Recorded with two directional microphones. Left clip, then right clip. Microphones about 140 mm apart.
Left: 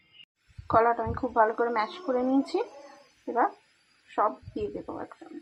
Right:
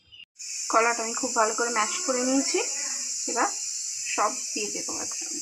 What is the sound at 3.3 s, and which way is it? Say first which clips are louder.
Speech: left 1 dB; 20° right (ahead or behind).